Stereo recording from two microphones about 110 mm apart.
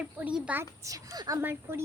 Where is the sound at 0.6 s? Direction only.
30° right (ahead or behind).